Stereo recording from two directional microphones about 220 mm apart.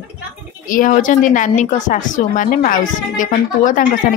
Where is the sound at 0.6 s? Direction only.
40° left (ahead or behind).